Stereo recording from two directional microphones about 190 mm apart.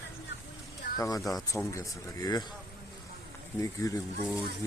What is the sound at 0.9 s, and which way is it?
Speech, 20° left (ahead or behind).